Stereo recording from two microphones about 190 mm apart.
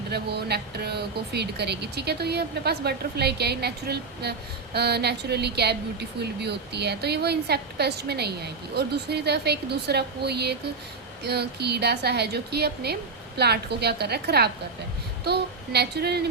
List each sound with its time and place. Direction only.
0.1 s speech: 60° right (ahead or behind)